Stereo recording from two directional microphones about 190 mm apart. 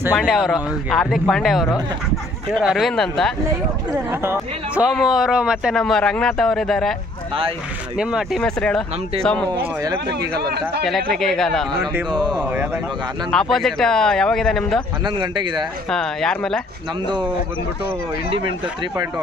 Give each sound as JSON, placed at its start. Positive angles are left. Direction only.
{"t": 0.1, "sound": "a man's voice", "side_deg": 5}
{"t": 4.1, "sound": "a man's voice", "side_deg": -10}
{"t": 8.0, "sound": "a man's voice", "side_deg": -5}
{"t": 9.5, "sound": "speech", "side_deg": -20}
{"t": 10.0, "sound": "a man's voice", "side_deg": -60}
{"t": 10.9, "sound": "a man's voice", "side_deg": 0}
{"t": 15.0, "sound": "speech", "side_deg": -25}
{"t": 15.9, "sound": "a man's voice", "side_deg": 5}